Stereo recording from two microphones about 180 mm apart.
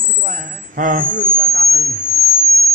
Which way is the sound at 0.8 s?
45° right (ahead or behind).